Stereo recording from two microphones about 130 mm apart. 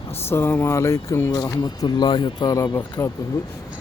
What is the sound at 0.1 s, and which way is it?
Speech, 20° left (ahead or behind).